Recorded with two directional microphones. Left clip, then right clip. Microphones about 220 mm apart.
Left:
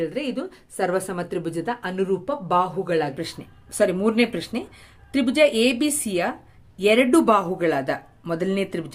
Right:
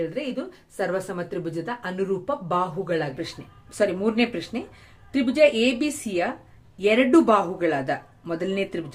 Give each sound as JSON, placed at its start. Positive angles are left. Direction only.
{"t": 0.0, "sound": "a woman's voice", "side_deg": 50}
{"t": 3.8, "sound": "speech", "side_deg": 30}